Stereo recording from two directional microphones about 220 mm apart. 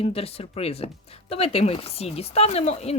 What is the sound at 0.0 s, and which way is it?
Speech, 25° left (ahead or behind).